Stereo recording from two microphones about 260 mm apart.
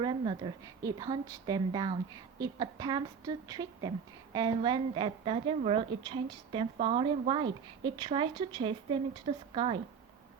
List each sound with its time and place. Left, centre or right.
0.0 s a woman's voice: centre